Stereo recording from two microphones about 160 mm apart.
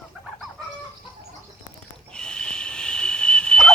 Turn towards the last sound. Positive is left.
turn(degrees=5)  # may be behind; listen again after turning